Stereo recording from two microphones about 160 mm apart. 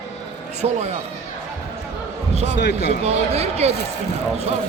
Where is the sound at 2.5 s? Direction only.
90° left.